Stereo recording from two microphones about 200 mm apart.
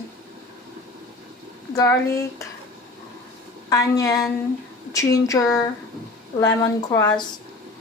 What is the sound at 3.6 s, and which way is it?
Speech, 15° left (ahead or behind).